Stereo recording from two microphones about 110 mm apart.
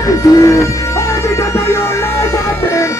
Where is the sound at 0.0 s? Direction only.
30° left (ahead or behind).